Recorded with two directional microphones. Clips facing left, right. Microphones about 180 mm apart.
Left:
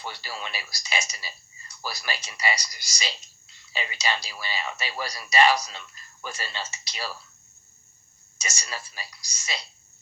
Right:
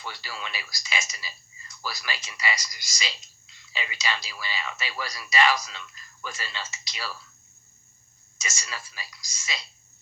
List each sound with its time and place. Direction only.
0.0 s speech: 35° left (ahead or behind)
8.4 s speech: 35° left (ahead or behind)